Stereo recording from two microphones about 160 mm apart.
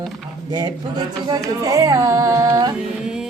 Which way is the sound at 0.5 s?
25° right (ahead or behind).